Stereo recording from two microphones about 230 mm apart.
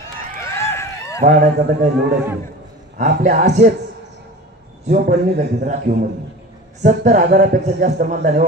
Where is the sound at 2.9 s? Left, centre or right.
Right.